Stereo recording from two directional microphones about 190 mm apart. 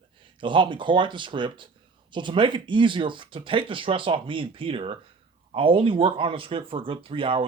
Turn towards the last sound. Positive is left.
turn(degrees=-25)  # may be behind; listen again after turning